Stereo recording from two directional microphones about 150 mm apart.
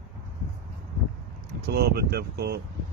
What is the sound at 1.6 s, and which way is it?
Speech, 90° right.